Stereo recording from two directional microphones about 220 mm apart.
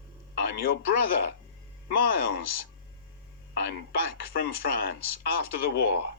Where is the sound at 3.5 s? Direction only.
50° left (ahead or behind).